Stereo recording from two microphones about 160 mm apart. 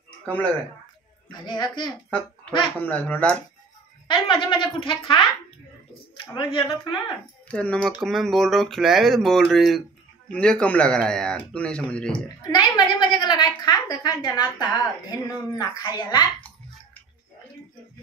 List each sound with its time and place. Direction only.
0.2 s speech: 10° left (ahead or behind)
1.3 s a woman's voice: 25° left (ahead or behind)
2.8 s speech: 10° left (ahead or behind)
4.1 s speech: 30° left (ahead or behind)
6.3 s speech: 30° left (ahead or behind)
7.4 s speech: 10° left (ahead or behind)
12.4 s a woman's voice: 25° left (ahead or behind)